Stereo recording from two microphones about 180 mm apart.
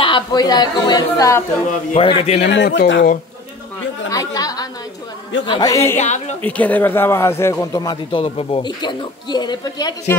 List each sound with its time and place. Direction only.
0.0 s a man's voice: 25° left (ahead or behind)
2.0 s a man's voice: 30° left (ahead or behind)
2.4 s speech: 80° left
4.1 s a man's voice: 20° left (ahead or behind)
5.9 s a man's voice: 40° left (ahead or behind)
6.4 s a man's voice: 10° left (ahead or behind)